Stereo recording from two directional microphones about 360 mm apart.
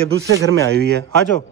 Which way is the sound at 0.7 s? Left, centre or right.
Right.